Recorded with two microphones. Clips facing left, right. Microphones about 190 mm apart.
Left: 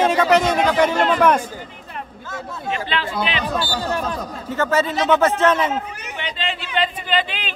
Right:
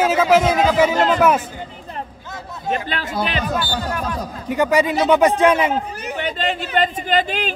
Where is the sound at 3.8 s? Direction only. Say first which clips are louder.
Left 1 dB; 25° left (ahead or behind).